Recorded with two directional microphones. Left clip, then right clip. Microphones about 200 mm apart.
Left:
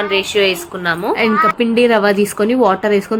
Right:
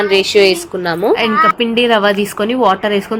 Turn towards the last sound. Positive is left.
turn(degrees=-10)  # may be behind; listen again after turning